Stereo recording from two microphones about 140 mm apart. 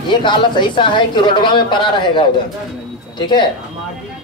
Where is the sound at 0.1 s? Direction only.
35° left (ahead or behind).